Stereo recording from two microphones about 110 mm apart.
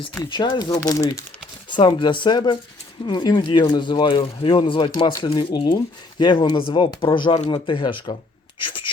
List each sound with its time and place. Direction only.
0.3 s speech: 45° left (ahead or behind)
0.9 s speech: 30° left (ahead or behind)
1.7 s speech: 50° left (ahead or behind)
8.6 s whispering: 50° left (ahead or behind)